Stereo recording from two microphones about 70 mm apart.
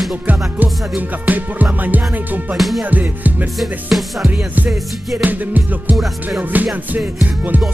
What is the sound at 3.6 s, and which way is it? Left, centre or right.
Music, centre.